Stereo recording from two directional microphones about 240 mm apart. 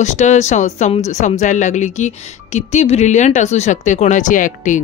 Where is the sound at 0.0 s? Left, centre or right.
Left.